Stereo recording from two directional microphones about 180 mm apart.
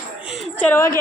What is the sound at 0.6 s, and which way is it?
Speech, 10° left (ahead or behind).